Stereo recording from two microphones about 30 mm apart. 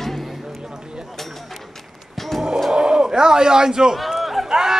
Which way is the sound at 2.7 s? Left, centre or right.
Right.